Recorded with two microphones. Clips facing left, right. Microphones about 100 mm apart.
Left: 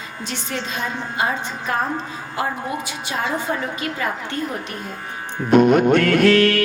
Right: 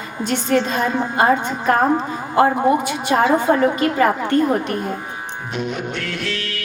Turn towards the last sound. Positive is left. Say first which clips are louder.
# left 12 dB
turn(degrees=55)  # may be behind; listen again after turning